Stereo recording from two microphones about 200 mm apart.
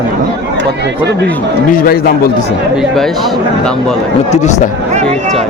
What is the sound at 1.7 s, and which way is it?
Speech, 50° left (ahead or behind).